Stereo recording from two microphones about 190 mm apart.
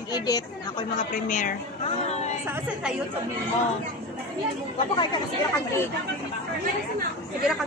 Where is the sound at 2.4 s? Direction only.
10° right (ahead or behind).